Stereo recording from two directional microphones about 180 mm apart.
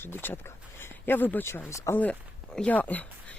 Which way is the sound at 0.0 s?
10° left (ahead or behind).